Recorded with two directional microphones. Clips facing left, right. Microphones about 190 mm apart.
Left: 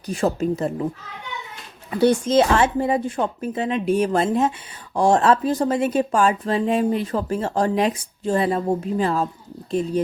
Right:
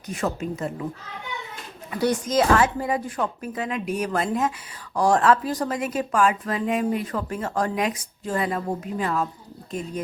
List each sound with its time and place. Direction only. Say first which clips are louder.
0.1 s speech: left 6 dB; 30° left (ahead or behind)
1.9 s speech: left 6 dB; 30° left (ahead or behind)